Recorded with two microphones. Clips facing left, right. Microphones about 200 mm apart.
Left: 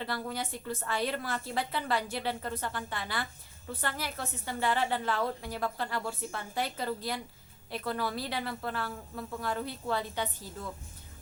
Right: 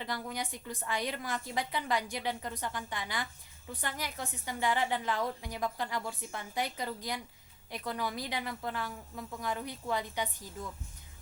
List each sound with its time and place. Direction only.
0.0 s a woman's voice: 15° right (ahead or behind)